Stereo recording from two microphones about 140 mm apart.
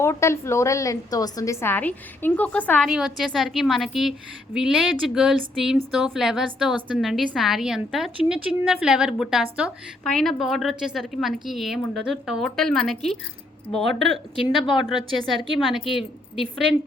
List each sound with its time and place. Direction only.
0.0 s a woman's voice: 20° left (ahead or behind)
2.8 s a woman's voice: centre (ahead or behind)
14.3 s a woman's voice: 35° left (ahead or behind)
15.6 s a woman's voice: centre (ahead or behind)